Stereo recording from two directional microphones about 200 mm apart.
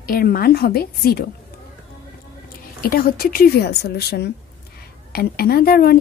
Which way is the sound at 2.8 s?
50° left (ahead or behind).